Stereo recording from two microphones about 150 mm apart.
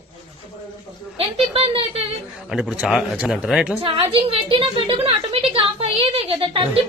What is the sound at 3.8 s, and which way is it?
A woman's voice, 40° right (ahead or behind).